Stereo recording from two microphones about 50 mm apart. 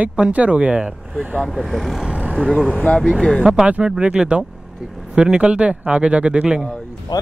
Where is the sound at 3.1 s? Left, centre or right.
Centre.